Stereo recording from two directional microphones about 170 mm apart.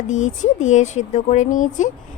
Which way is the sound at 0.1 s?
45° left (ahead or behind).